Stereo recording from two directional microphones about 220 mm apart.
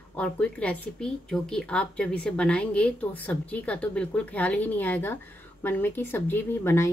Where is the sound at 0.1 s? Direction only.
5° left (ahead or behind).